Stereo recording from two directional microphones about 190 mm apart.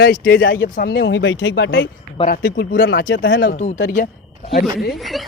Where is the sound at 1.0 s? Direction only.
75° left (ahead or behind).